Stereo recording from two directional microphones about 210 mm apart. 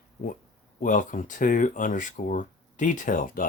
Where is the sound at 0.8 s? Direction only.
40° left (ahead or behind).